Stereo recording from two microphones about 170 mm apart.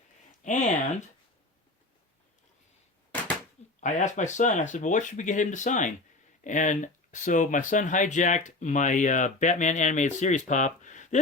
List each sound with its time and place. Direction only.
0.4 s speech: 45° left (ahead or behind)
3.8 s speech: 45° left (ahead or behind)